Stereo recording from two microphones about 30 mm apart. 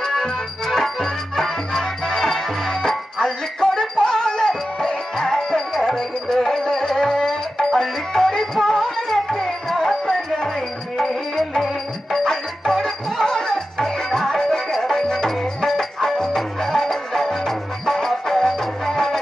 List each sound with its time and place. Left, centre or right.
0.0 s music: centre